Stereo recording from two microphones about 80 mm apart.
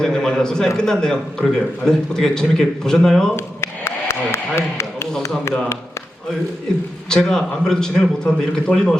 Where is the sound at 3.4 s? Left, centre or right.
Left.